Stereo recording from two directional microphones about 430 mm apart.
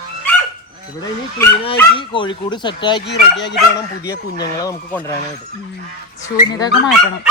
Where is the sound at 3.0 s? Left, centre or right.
Left.